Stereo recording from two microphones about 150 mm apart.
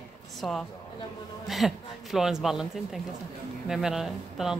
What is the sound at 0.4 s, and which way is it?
A man's voice, centre (ahead or behind).